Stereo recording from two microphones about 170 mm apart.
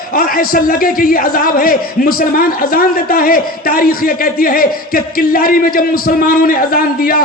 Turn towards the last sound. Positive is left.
turn(degrees=55)  # may be behind; listen again after turning